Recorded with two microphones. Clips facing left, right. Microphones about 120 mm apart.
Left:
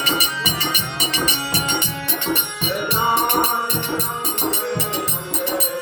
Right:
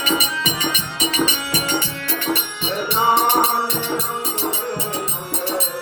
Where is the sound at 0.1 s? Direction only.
30° left (ahead or behind).